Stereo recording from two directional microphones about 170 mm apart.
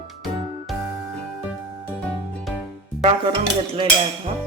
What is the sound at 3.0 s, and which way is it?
Speech, 30° right (ahead or behind).